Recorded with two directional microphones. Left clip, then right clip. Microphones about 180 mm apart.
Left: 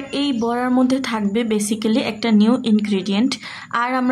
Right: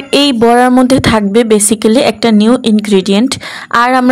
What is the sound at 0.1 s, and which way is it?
A woman's voice, 45° right (ahead or behind).